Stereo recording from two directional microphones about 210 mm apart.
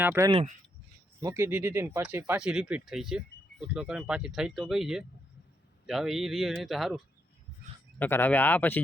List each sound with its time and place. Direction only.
0.0 s speech: 10° right (ahead or behind)
0.3 s speech: 25° right (ahead or behind)
1.2 s speech: 15° right (ahead or behind)
7.9 s speech: 10° left (ahead or behind)